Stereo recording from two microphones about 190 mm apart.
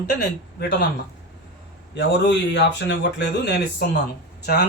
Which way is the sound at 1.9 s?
65° left (ahead or behind).